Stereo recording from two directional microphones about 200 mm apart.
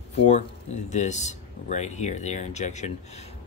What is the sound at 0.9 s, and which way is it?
Speech, 35° left (ahead or behind).